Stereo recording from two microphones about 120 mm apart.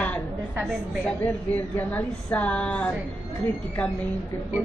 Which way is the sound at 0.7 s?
10° left (ahead or behind).